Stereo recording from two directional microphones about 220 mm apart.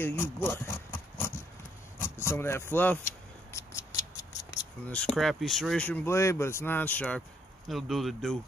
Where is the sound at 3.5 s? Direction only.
15° left (ahead or behind).